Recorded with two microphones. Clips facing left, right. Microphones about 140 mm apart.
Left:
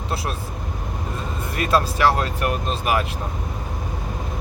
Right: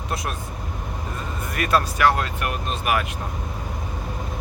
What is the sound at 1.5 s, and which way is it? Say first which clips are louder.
Speech: left 1 dB; 30° left (ahead or behind).